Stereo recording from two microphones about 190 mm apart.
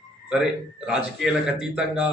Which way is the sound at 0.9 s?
5° right (ahead or behind).